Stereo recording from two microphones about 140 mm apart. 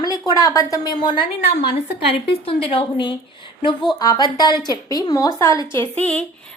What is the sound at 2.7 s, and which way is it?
A woman's voice, 35° left (ahead or behind).